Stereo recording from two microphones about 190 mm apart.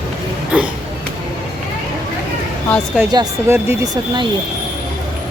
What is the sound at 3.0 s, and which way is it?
Speech, 15° right (ahead or behind).